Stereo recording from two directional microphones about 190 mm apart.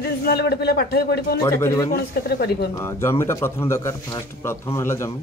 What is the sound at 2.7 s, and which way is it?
Speech, 15° left (ahead or behind).